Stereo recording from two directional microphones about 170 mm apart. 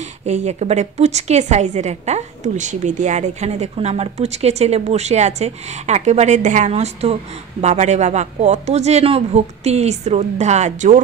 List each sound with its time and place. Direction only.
0.2 s a woman's voice: 40° right (ahead or behind)